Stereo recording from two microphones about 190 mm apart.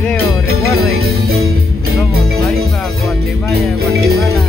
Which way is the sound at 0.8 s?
55° right (ahead or behind).